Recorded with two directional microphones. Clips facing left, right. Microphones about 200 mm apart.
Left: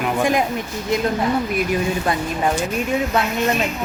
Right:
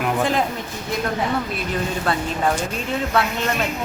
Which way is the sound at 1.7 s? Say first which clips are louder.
Left 3 dB; 15° left (ahead or behind).